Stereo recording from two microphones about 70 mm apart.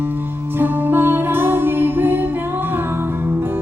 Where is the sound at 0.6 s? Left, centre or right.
Right.